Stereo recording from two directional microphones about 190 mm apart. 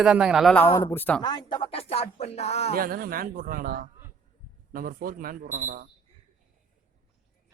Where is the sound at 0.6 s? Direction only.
15° left (ahead or behind).